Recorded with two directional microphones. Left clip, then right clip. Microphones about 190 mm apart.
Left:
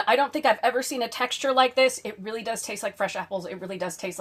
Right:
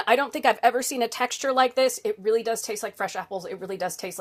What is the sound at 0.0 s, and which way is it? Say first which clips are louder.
A woman's voice: even; 45° right (ahead or behind).